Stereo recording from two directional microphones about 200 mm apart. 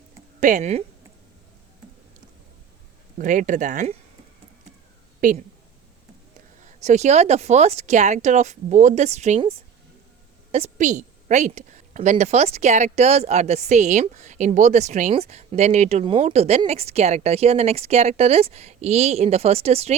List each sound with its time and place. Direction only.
0.3 s a woman's voice: 40° right (ahead or behind)
3.2 s a woman's voice: 40° right (ahead or behind)
5.2 s a woman's voice: 40° right (ahead or behind)
6.6 s a woman's voice: 35° right (ahead or behind)